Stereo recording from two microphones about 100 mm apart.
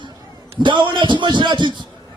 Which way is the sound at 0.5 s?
55° right (ahead or behind).